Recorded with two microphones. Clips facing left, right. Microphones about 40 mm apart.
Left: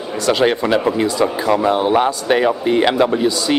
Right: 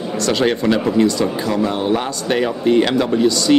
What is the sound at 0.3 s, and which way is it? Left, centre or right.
A man's voice, centre.